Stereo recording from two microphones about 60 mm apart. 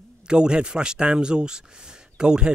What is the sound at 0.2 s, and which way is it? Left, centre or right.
Speech, centre.